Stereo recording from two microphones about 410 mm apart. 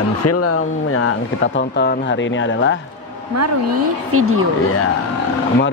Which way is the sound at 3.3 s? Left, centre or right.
Right.